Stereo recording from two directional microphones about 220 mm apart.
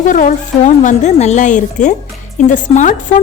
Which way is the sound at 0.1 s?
35° left (ahead or behind).